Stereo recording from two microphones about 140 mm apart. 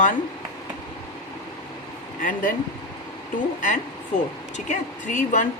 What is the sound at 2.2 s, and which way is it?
Speech, 80° left.